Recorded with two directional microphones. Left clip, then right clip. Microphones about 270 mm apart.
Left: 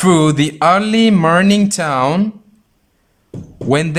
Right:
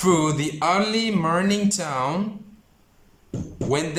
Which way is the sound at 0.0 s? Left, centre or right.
Left.